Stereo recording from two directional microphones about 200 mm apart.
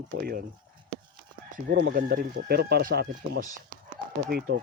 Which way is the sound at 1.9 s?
45° right (ahead or behind).